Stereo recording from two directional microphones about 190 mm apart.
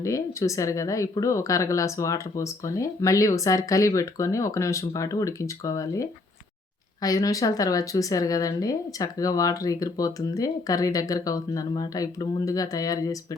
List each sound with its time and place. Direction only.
0.0 s speech: 15° left (ahead or behind)